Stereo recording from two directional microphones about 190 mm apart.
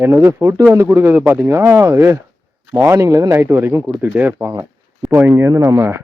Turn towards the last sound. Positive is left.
turn(degrees=-15)  # may be behind; listen again after turning